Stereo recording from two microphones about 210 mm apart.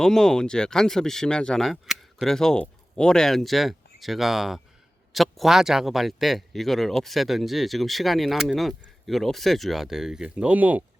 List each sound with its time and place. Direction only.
0.0 s speech: 5° left (ahead or behind)